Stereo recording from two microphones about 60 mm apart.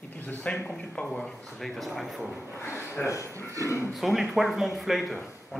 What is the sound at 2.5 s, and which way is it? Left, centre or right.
A man's voice, left.